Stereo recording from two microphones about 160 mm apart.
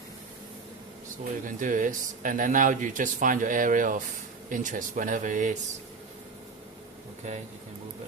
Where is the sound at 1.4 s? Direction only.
55° right (ahead or behind).